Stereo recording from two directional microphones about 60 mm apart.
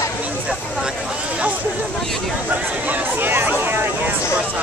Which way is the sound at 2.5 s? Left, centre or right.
Right.